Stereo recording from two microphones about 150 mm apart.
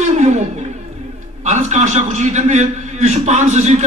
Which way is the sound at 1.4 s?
50° right (ahead or behind).